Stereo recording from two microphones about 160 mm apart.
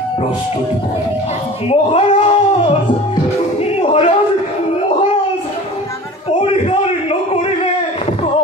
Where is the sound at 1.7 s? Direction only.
40° left (ahead or behind).